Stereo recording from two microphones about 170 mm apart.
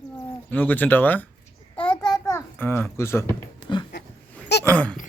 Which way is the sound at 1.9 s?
5° left (ahead or behind).